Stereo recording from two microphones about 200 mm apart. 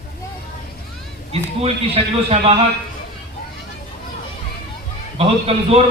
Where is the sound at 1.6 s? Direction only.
30° right (ahead or behind).